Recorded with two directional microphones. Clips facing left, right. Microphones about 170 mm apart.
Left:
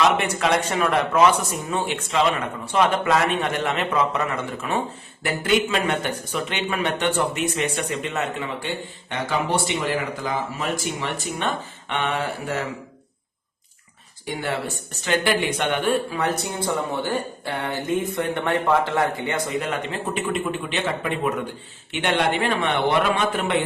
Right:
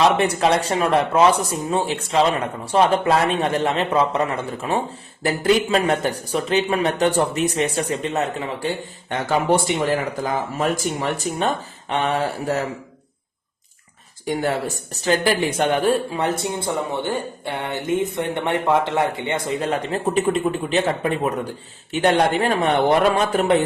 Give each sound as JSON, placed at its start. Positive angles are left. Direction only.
{"t": 0.0, "sound": "speech", "side_deg": -35}
{"t": 14.3, "sound": "speech", "side_deg": -40}